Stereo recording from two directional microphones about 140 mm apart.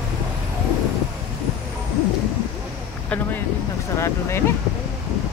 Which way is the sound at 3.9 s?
20° left (ahead or behind).